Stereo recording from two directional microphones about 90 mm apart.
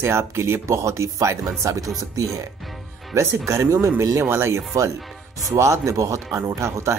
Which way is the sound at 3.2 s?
30° right (ahead or behind).